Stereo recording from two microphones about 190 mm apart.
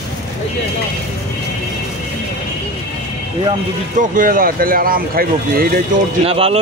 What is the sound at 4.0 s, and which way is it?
Speech, 45° right (ahead or behind).